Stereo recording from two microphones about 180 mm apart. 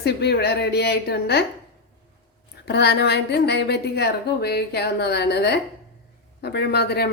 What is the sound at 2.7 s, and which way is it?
A woman's voice, 70° left (ahead or behind).